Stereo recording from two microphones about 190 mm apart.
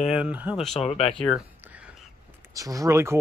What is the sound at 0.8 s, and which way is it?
Speech, 35° left (ahead or behind).